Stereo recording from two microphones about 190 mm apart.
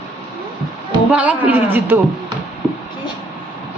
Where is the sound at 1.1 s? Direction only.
5° right (ahead or behind).